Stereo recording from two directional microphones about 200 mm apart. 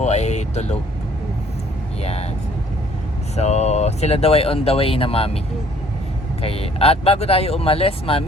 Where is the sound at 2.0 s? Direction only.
30° left (ahead or behind).